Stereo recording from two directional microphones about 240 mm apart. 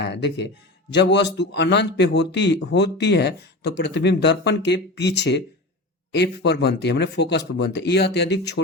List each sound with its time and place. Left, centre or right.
0.0 s a man's voice: left